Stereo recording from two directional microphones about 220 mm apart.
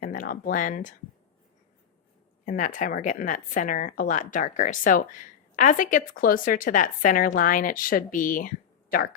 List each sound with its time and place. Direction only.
0.0 s speech: 40° left (ahead or behind)
2.5 s a woman's voice: 35° left (ahead or behind)